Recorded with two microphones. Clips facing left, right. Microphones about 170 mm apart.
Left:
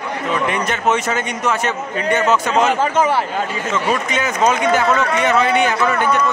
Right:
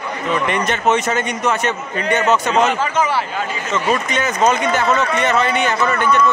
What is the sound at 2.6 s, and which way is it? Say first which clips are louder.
Speech: left 2 dB; 50° left (ahead or behind).